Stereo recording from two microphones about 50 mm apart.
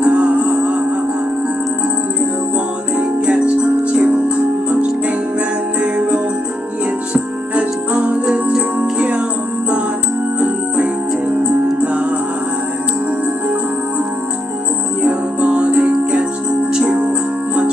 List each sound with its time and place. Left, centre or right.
0.0 s music: right
3.0 s music: right
5.9 s music: right
15.0 s music: right